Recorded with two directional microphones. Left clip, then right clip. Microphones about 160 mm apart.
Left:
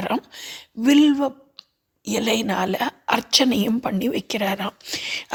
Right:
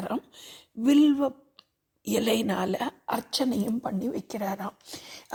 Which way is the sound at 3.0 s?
15° left (ahead or behind).